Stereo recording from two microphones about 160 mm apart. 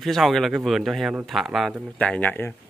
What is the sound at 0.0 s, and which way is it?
Speech, centre (ahead or behind).